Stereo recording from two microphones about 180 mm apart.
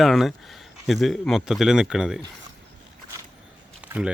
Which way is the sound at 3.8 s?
10° right (ahead or behind).